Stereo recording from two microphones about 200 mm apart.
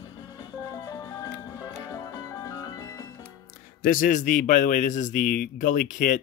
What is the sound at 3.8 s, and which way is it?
Speech, 45° left (ahead or behind).